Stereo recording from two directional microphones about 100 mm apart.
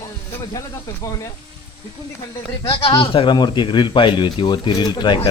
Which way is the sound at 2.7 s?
60° left (ahead or behind).